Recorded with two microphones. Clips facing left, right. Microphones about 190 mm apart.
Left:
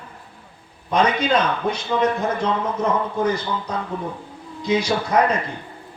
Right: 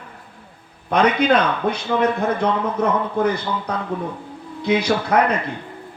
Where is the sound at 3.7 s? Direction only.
60° right (ahead or behind).